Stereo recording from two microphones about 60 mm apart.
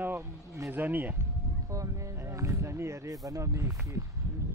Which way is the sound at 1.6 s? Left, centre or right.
Right.